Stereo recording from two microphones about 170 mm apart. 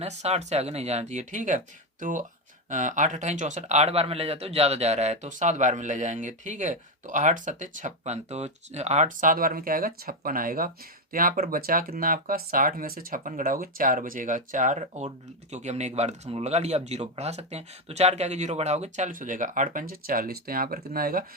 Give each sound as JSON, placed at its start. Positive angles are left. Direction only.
{"t": 0.0, "sound": "speech", "side_deg": -40}